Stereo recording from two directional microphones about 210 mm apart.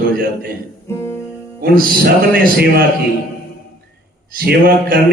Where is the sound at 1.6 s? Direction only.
45° right (ahead or behind).